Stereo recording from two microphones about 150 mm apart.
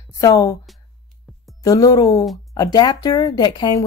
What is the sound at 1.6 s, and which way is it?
Speech, 25° left (ahead or behind).